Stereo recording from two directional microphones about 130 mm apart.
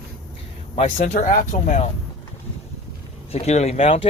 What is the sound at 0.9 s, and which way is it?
Speech, 80° left.